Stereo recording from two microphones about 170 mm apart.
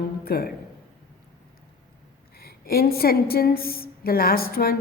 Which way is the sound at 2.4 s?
65° left (ahead or behind).